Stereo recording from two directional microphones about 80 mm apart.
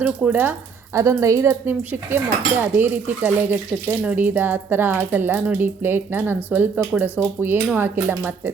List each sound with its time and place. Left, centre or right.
0.0 s speech: centre
0.9 s a woman's voice: right
1.5 s cutlery: right